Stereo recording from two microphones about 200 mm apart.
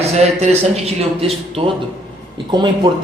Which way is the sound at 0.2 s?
35° right (ahead or behind).